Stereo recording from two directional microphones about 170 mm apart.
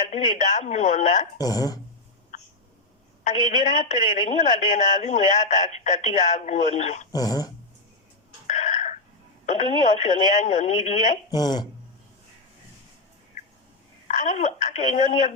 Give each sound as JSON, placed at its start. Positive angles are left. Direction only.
{"t": 0.1, "sound": "a woman's voice", "side_deg": 45}
{"t": 1.4, "sound": "speech", "side_deg": 20}
{"t": 2.3, "sound": "hiccup", "side_deg": 45}
{"t": 3.2, "sound": "a woman's voice", "side_deg": 45}
{"t": 7.1, "sound": "speech", "side_deg": 20}
{"t": 8.4, "sound": "a sound", "side_deg": 45}
{"t": 9.8, "sound": "a woman's voice", "side_deg": 45}
{"t": 11.3, "sound": "speech", "side_deg": 25}
{"t": 14.1, "sound": "a woman's voice", "side_deg": 45}